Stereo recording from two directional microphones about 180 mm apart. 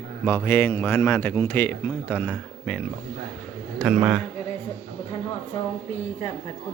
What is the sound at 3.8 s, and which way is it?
Speech, centre (ahead or behind).